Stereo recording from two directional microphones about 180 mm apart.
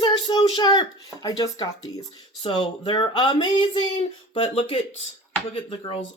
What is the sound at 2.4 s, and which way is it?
Speech, 25° left (ahead or behind).